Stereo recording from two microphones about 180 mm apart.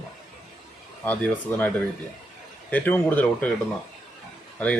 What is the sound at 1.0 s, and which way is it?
Speech, 10° left (ahead or behind).